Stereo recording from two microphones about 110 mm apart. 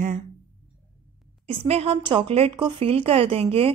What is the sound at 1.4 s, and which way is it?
Speech, 65° right (ahead or behind).